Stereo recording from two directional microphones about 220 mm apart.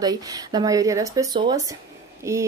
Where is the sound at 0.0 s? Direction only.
15° right (ahead or behind).